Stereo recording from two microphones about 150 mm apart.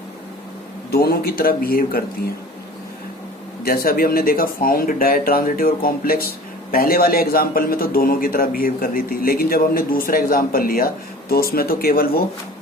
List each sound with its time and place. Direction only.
0.9 s speech: 90° left
3.6 s speech: 85° left